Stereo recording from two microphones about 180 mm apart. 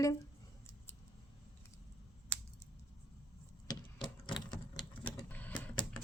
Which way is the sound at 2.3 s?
10° left (ahead or behind).